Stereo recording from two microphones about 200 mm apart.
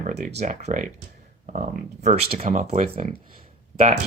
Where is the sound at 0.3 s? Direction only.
35° right (ahead or behind).